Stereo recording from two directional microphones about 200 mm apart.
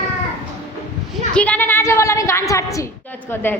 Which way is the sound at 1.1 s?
5° left (ahead or behind).